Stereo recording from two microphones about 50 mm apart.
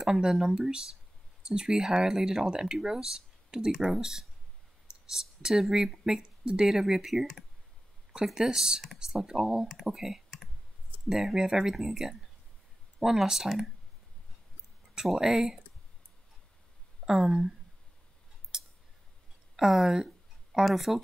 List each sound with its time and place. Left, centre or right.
0.0 s speech: centre
8.4 s speech: centre
9.7 s speech: centre
15.1 s speech: centre
17.0 s speech: centre
18.5 s scissors: centre
19.5 s speech: centre